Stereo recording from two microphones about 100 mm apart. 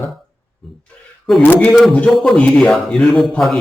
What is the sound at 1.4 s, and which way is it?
A man's voice, 15° left (ahead or behind).